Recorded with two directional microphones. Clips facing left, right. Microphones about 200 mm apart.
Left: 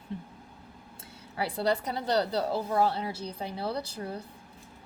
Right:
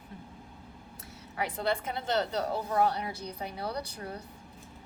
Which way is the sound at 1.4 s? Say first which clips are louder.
Left 3 dB; 35° left (ahead or behind).